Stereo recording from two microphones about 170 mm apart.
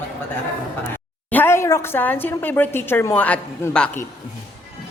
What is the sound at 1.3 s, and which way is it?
A woman's voice, 10° left (ahead or behind).